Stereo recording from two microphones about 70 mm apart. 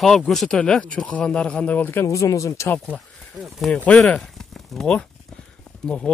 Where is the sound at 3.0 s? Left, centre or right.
Centre.